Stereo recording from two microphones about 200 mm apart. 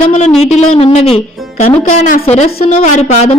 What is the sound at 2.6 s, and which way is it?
Speech, 35° left (ahead or behind).